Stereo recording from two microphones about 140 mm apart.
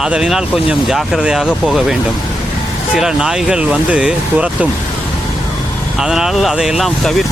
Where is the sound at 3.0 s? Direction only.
5° right (ahead or behind).